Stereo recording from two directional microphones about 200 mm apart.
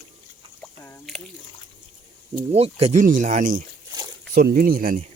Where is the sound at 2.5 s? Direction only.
30° right (ahead or behind).